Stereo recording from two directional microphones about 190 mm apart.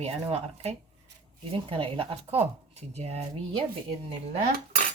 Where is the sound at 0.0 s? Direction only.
30° right (ahead or behind).